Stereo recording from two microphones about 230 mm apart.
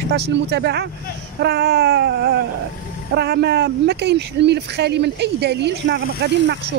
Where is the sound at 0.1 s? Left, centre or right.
Right.